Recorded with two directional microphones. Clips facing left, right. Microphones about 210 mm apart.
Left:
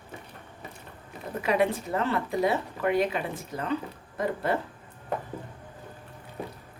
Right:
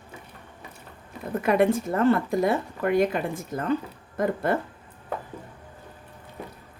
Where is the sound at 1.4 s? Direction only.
50° right (ahead or behind).